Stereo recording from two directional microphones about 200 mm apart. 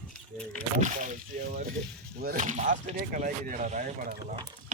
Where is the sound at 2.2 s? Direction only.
45° right (ahead or behind).